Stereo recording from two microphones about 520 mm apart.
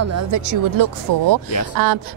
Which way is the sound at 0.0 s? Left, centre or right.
Right.